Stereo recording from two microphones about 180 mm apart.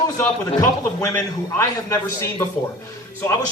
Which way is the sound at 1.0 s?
15° left (ahead or behind).